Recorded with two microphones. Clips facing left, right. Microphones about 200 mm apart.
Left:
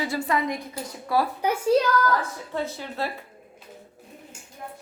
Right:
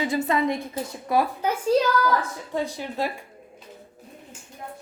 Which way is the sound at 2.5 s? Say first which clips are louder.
Right 2 dB; 15° right (ahead or behind).